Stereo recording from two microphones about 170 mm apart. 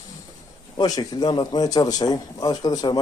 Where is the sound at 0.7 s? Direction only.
25° left (ahead or behind).